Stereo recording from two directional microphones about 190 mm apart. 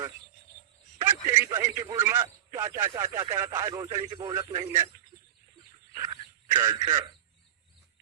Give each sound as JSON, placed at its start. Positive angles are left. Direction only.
{"t": 0.9, "sound": "a man's voice", "side_deg": -10}
{"t": 6.5, "sound": "a man's voice", "side_deg": -15}